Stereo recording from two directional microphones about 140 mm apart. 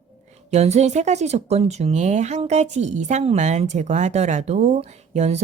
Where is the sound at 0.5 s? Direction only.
50° right (ahead or behind).